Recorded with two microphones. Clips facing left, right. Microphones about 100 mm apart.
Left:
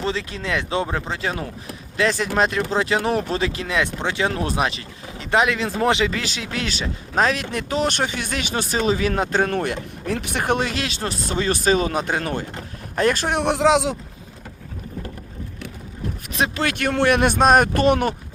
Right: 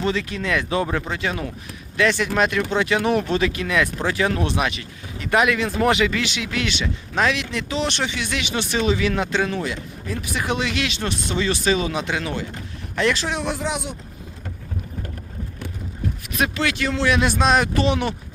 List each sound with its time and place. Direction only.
0.0 s speech: 30° left (ahead or behind); by 13.9 s 90° left
16.3 s speech: 30° left (ahead or behind)
16.6 s speech: 55° left (ahead or behind)